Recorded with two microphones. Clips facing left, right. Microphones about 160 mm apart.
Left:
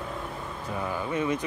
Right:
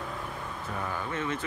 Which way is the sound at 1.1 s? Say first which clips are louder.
Left 7 dB; 15° left (ahead or behind).